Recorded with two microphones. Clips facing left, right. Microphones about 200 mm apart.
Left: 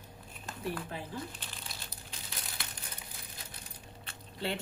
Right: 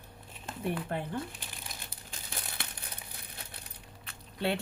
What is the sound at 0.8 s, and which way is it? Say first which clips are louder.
Speech: right 6 dB; 60° right (ahead or behind).